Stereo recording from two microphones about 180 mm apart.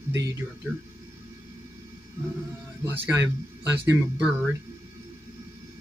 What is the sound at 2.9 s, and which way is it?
A man's voice, 10° right (ahead or behind).